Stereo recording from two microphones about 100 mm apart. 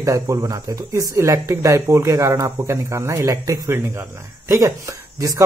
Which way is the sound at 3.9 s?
25° right (ahead or behind).